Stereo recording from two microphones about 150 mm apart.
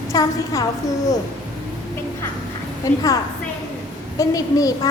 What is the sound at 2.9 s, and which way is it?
Speech, 20° left (ahead or behind).